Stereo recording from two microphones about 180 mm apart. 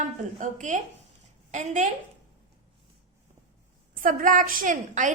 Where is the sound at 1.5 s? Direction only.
40° right (ahead or behind).